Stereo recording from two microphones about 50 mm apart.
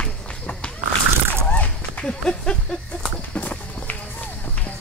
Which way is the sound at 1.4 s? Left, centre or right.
Left.